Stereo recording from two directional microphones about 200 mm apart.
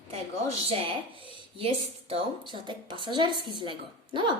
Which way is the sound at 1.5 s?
30° right (ahead or behind).